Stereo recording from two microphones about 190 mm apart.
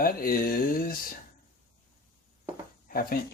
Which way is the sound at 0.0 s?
50° left (ahead or behind).